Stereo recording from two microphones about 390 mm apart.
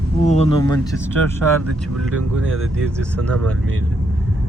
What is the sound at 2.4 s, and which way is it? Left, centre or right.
Speech, right.